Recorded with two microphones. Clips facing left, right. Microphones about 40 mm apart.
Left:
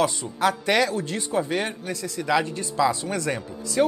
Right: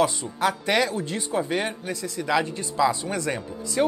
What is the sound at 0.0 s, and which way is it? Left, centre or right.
Speech, centre.